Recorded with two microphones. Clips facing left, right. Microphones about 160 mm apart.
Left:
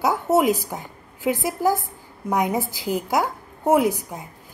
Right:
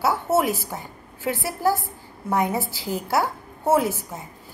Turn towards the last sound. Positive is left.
turn(degrees=15)  # may be behind; listen again after turning